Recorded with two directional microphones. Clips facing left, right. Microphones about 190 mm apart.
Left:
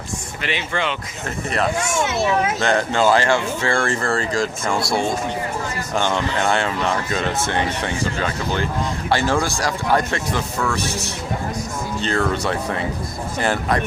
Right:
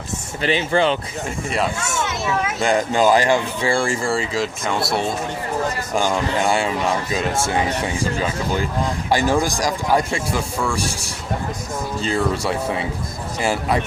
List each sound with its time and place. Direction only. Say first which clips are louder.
0.4 s speech: right 7 dB; 35° right (ahead or behind)
2.1 s a child's voice: left 5 dB; 30° left (ahead or behind)
2.6 s speech: right 1 dB; 10° right (ahead or behind)
11.9 s speech: even; 5° right (ahead or behind)